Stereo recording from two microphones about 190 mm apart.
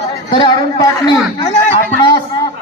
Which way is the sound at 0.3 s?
25° left (ahead or behind).